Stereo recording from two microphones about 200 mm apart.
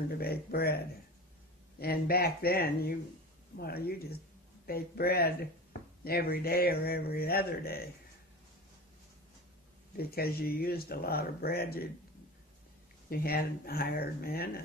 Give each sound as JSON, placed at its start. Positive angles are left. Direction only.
{"t": 0.2, "sound": "speech", "side_deg": 50}
{"t": 1.8, "sound": "speech", "side_deg": 50}
{"t": 9.9, "sound": "speech", "side_deg": 50}
{"t": 13.1, "sound": "speech", "side_deg": 50}